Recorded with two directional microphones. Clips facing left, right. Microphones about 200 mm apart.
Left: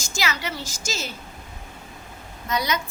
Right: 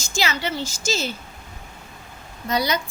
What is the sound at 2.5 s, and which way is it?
Speech, 35° right (ahead or behind).